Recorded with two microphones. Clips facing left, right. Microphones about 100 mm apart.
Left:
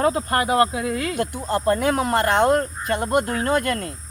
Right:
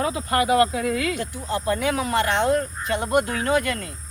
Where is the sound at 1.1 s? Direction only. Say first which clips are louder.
Left 4 dB; 50° left (ahead or behind).